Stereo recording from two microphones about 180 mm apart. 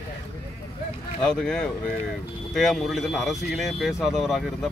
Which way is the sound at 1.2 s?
5° left (ahead or behind).